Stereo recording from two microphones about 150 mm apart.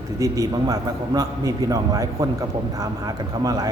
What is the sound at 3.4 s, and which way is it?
Speech, 25° right (ahead or behind).